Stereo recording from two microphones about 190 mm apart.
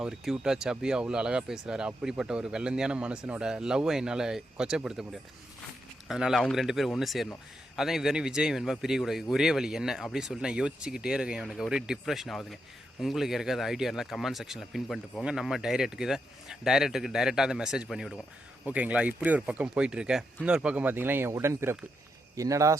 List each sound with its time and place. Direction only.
0.0 s speech: 5° right (ahead or behind)